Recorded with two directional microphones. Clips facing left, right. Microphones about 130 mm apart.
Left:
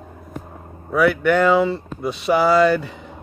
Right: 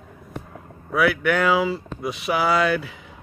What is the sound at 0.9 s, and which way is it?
Speech, centre (ahead or behind).